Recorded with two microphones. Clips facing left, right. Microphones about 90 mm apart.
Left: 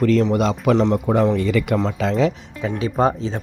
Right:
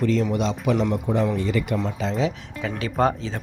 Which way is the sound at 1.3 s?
80° left.